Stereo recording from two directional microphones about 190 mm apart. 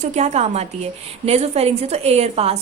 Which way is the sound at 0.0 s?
35° right (ahead or behind).